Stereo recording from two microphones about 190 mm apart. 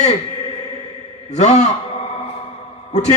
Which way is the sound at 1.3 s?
35° left (ahead or behind).